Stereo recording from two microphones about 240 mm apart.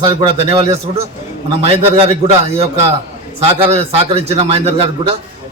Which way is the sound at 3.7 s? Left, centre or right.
Right.